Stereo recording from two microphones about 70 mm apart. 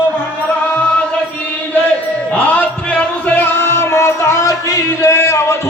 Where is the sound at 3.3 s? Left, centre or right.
Left.